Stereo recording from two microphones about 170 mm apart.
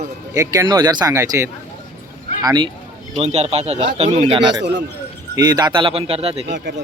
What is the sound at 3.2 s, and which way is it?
Speech, 40° right (ahead or behind).